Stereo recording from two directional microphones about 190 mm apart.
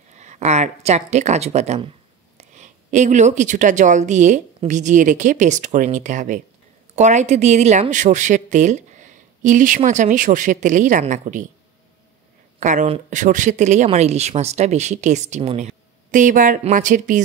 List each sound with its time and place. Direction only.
0.1 s speech: 40° right (ahead or behind)
12.5 s speech: 40° right (ahead or behind)